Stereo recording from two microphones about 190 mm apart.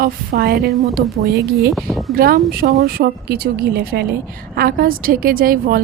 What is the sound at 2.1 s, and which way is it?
A woman's voice, 50° right (ahead or behind).